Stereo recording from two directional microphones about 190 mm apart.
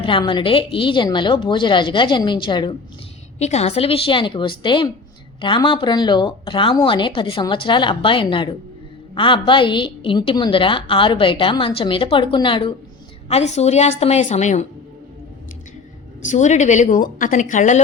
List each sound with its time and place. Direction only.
0.0 s a woman's voice: 25° left (ahead or behind)
3.3 s a woman's voice: 35° left (ahead or behind)
16.2 s a woman's voice: 40° left (ahead or behind)